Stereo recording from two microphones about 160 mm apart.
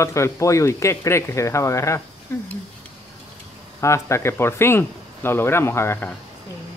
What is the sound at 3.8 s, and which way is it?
Speech, 15° left (ahead or behind).